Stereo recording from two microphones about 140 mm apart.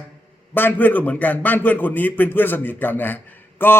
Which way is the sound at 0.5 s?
15° left (ahead or behind).